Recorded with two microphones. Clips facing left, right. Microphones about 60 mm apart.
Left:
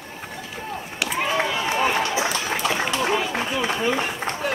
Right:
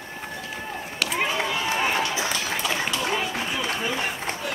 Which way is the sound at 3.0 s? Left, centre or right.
Left.